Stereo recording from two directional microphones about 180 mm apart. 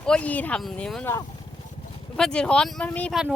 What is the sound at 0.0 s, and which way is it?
Speech, 5° left (ahead or behind).